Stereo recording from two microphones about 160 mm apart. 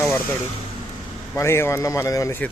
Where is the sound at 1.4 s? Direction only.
15° left (ahead or behind).